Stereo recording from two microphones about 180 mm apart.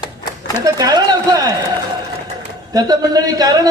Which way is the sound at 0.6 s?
20° right (ahead or behind).